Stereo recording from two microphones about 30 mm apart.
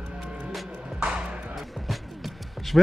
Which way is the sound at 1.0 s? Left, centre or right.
Right.